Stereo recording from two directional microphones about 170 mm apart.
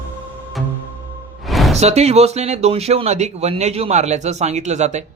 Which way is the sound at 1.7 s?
40° right (ahead or behind).